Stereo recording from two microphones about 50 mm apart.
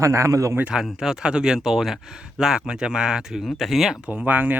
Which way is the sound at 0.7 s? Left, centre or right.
Centre.